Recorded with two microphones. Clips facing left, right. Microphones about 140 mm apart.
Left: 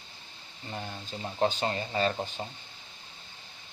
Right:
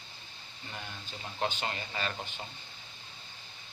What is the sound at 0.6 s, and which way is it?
Speech, 35° left (ahead or behind).